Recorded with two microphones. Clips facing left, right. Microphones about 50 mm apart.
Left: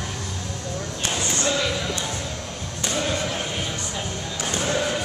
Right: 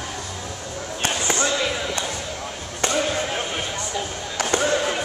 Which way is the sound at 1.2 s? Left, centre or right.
Right.